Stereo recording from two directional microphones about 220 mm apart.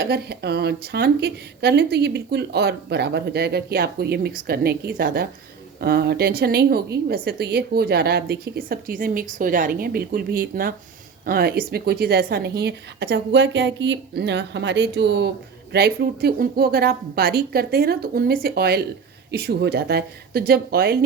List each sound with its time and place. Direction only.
0.0 s speech: 45° right (ahead or behind)